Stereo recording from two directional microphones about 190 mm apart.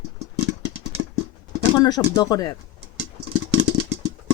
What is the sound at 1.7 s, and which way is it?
Speech, 20° left (ahead or behind).